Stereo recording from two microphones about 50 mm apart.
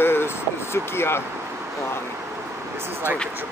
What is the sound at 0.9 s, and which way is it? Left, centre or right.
Speech, left.